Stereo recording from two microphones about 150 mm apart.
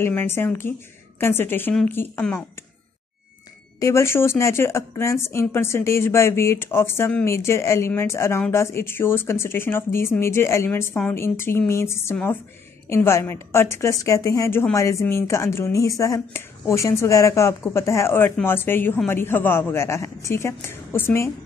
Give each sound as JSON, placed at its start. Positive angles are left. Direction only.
{"t": 0.0, "sound": "speech", "side_deg": 15}
{"t": 3.8, "sound": "a woman's voice", "side_deg": 20}